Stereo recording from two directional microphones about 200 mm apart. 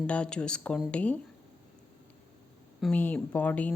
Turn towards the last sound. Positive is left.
turn(degrees=10)  # may be behind; listen again after turning